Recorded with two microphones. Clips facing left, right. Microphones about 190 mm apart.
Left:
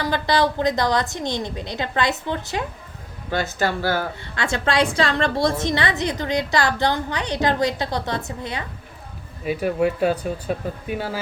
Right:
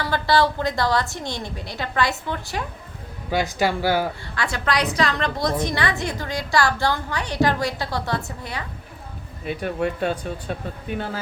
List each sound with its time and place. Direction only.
0.0 s a woman's voice: 20° left (ahead or behind)
3.2 s speech: 15° right (ahead or behind)
4.4 s a woman's voice: 25° left (ahead or behind)
9.5 s speech: 5° left (ahead or behind)